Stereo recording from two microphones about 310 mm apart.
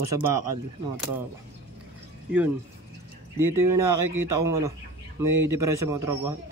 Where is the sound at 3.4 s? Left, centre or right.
Right.